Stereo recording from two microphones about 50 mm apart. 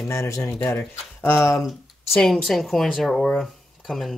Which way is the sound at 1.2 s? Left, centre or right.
Left.